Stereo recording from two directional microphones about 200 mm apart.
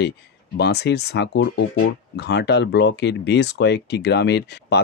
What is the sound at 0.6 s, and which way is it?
Speech, 55° left (ahead or behind).